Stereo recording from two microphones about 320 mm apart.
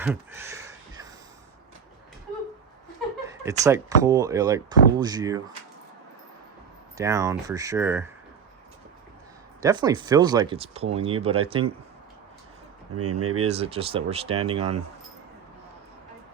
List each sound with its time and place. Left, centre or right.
0.0 s a sound: centre
3.2 s speech: centre
6.9 s speech: centre
9.6 s speech: centre
13.0 s speech: right
13.5 s speech: centre